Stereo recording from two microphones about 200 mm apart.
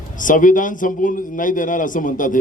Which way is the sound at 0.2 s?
40° left (ahead or behind).